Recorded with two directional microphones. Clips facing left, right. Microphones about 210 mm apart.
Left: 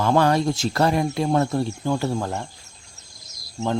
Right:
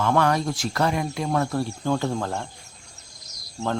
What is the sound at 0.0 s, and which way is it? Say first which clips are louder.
Speech: left 3 dB; 30° left (ahead or behind).